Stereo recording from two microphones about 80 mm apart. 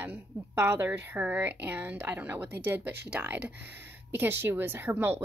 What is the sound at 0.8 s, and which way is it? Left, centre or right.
Speech, right.